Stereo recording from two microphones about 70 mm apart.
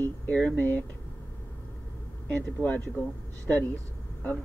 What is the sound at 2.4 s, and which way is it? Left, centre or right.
Speech, left.